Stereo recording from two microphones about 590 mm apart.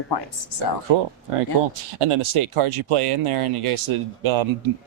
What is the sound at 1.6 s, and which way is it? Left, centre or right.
Speech, right.